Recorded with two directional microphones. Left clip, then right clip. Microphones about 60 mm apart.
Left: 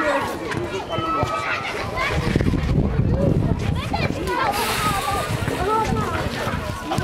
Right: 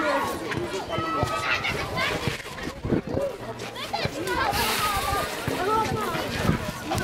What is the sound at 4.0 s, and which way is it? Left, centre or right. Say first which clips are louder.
Children playing: left 4 dB; right.